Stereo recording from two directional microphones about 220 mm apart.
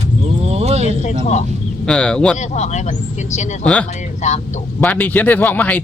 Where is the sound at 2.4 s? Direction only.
30° left (ahead or behind).